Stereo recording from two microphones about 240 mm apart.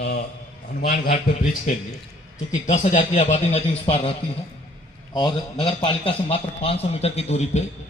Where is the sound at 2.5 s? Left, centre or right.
Left.